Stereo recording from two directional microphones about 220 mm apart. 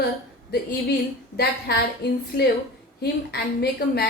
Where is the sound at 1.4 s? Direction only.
45° left (ahead or behind).